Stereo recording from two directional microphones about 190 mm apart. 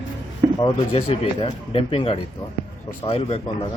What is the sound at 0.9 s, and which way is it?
A man's voice, 30° left (ahead or behind).